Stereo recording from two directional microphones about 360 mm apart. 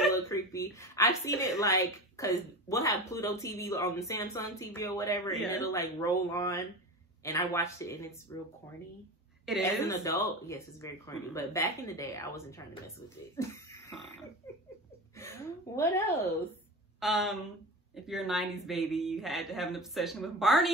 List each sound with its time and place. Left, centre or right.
0.0 s a woman's voice: centre
9.5 s a woman's voice: centre
13.4 s a sound: centre
15.1 s a woman's voice: centre
17.0 s speech: centre